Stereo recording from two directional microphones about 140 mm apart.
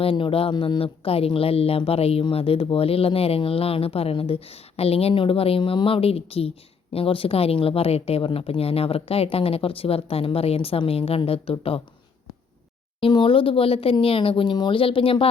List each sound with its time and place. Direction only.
0.0 s speech: 40° left (ahead or behind)
13.0 s speech: 35° left (ahead or behind)